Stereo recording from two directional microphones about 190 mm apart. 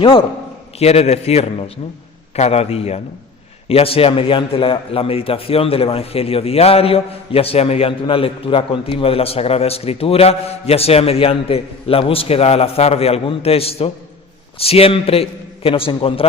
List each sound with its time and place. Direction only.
0.0 s a man's voice: 25° left (ahead or behind)